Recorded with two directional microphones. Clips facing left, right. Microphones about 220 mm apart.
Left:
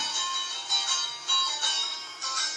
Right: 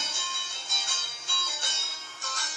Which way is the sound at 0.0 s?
25° right (ahead or behind).